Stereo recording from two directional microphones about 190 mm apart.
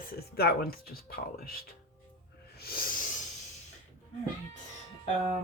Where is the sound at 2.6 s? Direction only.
55° left (ahead or behind).